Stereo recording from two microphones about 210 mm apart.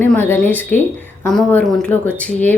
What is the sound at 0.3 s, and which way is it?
Speech, 10° left (ahead or behind).